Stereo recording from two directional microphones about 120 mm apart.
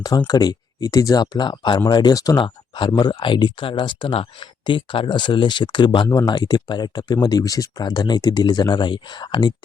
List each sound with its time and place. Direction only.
0.3 s speech: 35° left (ahead or behind)
2.4 s speech: 45° left (ahead or behind)